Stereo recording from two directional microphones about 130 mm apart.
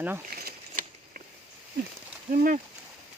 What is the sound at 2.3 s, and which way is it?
Speech, 90° right.